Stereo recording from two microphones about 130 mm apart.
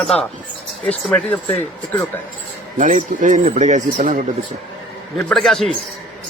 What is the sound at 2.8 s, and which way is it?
Speech, 70° right (ahead or behind).